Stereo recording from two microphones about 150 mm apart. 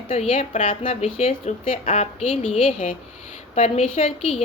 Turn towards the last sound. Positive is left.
turn(degrees=45)  # may be behind; listen again after turning